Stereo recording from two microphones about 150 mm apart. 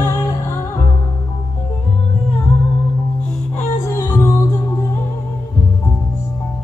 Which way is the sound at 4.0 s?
20° left (ahead or behind).